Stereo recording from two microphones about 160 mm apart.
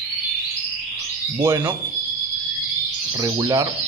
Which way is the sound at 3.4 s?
20° right (ahead or behind).